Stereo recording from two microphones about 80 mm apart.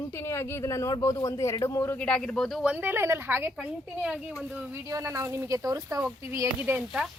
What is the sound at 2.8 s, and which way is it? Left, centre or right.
Speech, right.